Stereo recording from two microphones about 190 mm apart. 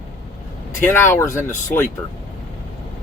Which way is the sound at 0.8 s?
10° left (ahead or behind).